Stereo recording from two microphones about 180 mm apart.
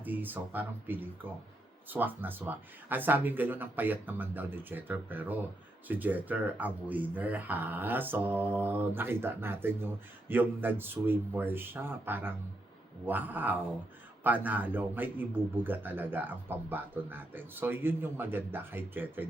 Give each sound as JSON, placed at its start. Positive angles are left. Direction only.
{"t": 0.0, "sound": "a man's voice", "side_deg": -10}